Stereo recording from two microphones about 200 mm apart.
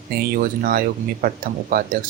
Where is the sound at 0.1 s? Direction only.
50° right (ahead or behind).